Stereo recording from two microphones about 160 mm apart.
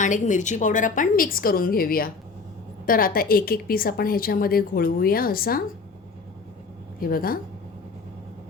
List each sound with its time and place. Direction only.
0.0 s a woman's voice: 50° left (ahead or behind); by 5.6 s 65° left (ahead or behind)
7.0 s a woman's voice: 65° left (ahead or behind)